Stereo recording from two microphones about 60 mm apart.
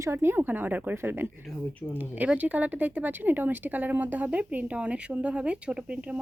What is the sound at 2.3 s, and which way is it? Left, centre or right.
Speech, right.